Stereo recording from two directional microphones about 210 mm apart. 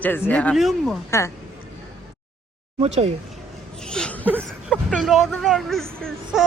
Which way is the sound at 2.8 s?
30° right (ahead or behind).